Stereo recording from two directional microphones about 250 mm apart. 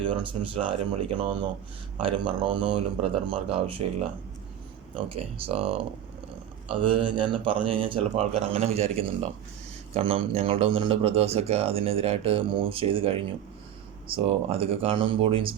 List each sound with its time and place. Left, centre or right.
0.0 s a man's voice: right
4.9 s a man's voice: right